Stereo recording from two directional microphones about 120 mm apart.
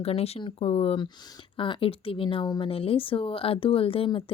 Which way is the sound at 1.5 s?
45° left (ahead or behind).